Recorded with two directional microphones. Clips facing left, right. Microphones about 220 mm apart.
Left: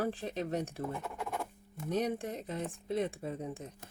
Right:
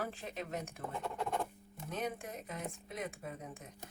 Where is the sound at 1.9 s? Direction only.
35° left (ahead or behind).